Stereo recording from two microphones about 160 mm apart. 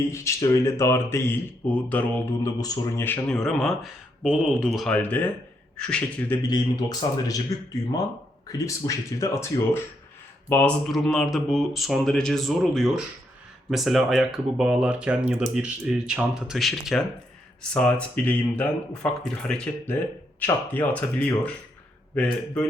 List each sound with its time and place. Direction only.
0.1 s a man's voice: 20° left (ahead or behind)
2.4 s a man's voice: 25° left (ahead or behind)
6.5 s a man's voice: 25° left (ahead or behind); by 22.6 s 5° left (ahead or behind)